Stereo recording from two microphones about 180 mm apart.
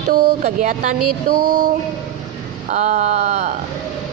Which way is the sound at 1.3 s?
55° right (ahead or behind).